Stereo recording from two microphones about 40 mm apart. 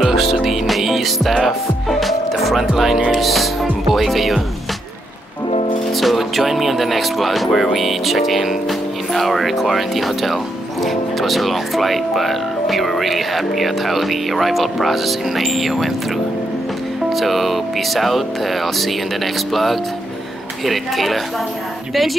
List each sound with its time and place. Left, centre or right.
0.0 s music: centre
3.1 s speech: centre
5.9 s music: centre
7.5 s speech: centre
17.1 s speech: centre